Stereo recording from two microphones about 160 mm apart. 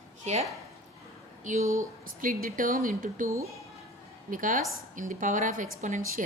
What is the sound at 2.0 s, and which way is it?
A woman's voice, 60° right (ahead or behind).